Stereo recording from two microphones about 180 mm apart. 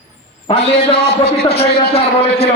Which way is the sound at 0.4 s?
35° left (ahead or behind).